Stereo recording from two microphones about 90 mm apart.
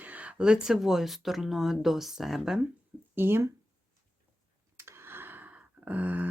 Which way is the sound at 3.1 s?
25° right (ahead or behind).